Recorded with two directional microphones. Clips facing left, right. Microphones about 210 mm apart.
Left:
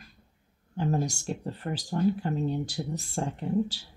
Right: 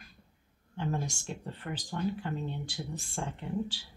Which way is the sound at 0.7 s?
40° left (ahead or behind).